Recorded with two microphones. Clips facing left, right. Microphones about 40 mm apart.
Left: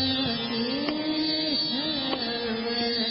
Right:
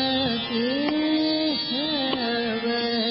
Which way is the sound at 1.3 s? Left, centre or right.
Centre.